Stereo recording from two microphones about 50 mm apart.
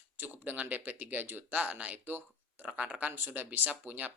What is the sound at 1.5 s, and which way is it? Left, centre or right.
Speech, right.